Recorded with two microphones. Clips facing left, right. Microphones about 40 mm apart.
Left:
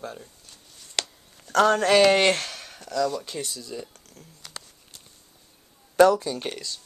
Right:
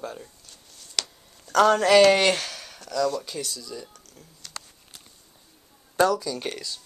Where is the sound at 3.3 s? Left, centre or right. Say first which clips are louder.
Left 1 dB; left.